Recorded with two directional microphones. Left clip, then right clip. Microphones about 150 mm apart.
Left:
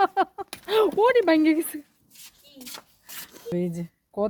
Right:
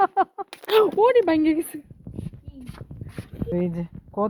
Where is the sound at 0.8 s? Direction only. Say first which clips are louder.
Right 1 dB; 5° left (ahead or behind).